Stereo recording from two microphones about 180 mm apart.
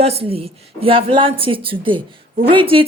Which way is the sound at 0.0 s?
35° right (ahead or behind).